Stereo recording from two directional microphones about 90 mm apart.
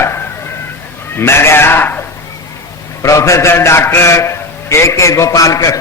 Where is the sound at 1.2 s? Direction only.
30° left (ahead or behind).